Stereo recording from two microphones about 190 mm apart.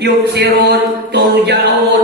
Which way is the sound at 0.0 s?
60° right (ahead or behind).